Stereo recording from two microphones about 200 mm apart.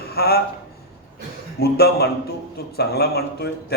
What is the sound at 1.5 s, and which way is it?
A man's voice, 50° left (ahead or behind).